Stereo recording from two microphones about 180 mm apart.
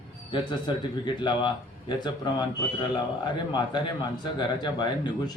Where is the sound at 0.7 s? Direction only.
25° left (ahead or behind).